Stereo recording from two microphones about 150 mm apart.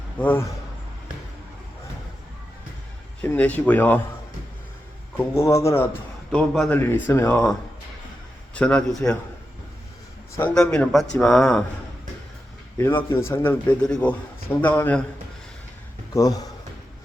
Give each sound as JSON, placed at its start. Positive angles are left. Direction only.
{"t": 0.2, "sound": "a man's voice", "side_deg": 15}
{"t": 3.2, "sound": "a man's voice", "side_deg": 10}
{"t": 5.1, "sound": "speech", "side_deg": 15}
{"t": 6.3, "sound": "speech", "side_deg": 5}
{"t": 6.7, "sound": "a man's voice", "side_deg": 15}
{"t": 8.5, "sound": "a man's voice", "side_deg": 5}
{"t": 10.5, "sound": "speech", "side_deg": 5}
{"t": 12.7, "sound": "a man's voice", "side_deg": 15}
{"t": 16.1, "sound": "speech", "side_deg": 25}